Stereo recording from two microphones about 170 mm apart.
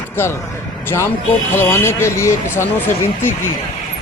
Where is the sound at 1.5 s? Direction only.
15° left (ahead or behind).